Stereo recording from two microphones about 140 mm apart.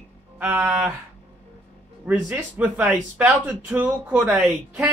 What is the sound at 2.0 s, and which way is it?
Speech, 10° right (ahead or behind).